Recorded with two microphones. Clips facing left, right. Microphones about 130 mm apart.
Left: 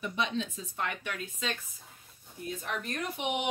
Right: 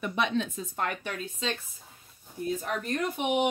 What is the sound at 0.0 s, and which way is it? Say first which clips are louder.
Speech: right 4 dB; 60° right (ahead or behind).